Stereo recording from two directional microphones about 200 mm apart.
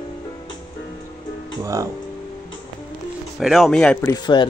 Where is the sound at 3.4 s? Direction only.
Centre (ahead or behind).